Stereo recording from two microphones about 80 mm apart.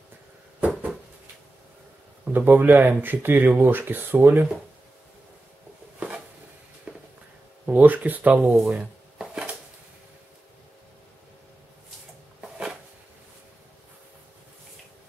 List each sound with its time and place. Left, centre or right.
2.2 s speech: right
5.9 s a sound: centre
6.9 s walk: centre
7.6 s speech: centre
8.6 s chopping: centre
12.4 s a sound: centre